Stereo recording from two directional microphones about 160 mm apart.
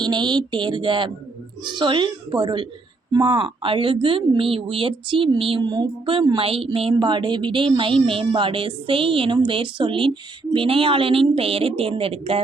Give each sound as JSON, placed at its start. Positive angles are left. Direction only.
{"t": 0.0, "sound": "a woman's voice", "side_deg": -30}